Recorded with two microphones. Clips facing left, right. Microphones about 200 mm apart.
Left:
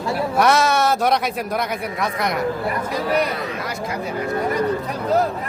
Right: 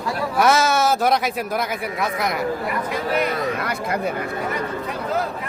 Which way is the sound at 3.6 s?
60° right (ahead or behind).